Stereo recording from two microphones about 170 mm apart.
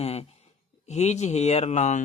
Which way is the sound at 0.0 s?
35° left (ahead or behind).